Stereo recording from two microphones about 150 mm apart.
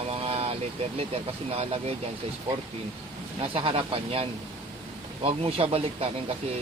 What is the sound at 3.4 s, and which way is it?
Speech, 40° right (ahead or behind).